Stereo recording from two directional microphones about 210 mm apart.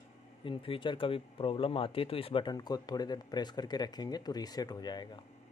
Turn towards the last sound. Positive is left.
turn(degrees=20)  # may be behind; listen again after turning